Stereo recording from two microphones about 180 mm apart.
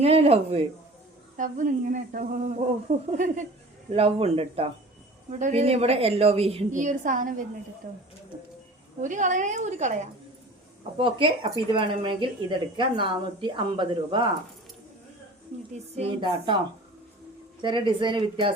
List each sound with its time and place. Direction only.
0.0 s a woman's voice: 35° right (ahead or behind)
1.4 s a woman's voice: 45° right (ahead or behind)
9.0 s a woman's voice: 45° right (ahead or behind)
10.9 s speech: 30° right (ahead or behind)
15.8 s a woman's voice: 30° right (ahead or behind)
17.6 s speech: 25° right (ahead or behind)